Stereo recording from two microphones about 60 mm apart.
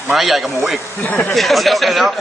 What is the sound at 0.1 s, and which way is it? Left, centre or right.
Speech, centre.